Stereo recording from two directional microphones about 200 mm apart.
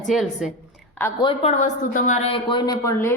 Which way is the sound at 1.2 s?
35° left (ahead or behind).